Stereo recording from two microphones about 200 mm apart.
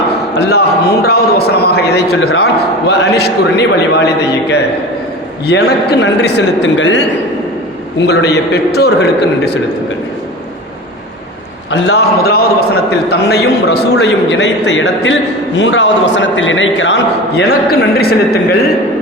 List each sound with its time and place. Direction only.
0.3 s a man's voice: 55° left (ahead or behind); by 7.0 s 70° left (ahead or behind)
7.9 s a man's voice: 55° left (ahead or behind)
11.7 s a man's voice: 60° left (ahead or behind)